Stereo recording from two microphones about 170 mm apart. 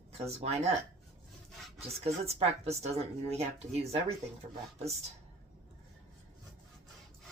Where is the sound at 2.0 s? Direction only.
35° right (ahead or behind).